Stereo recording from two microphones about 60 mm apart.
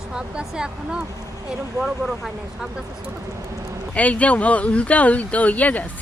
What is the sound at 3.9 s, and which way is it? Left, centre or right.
Speech, left.